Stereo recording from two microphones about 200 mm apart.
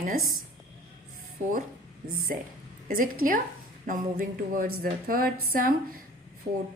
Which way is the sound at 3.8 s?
45° right (ahead or behind).